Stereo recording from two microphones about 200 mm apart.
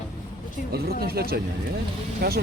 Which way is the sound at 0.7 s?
50° right (ahead or behind).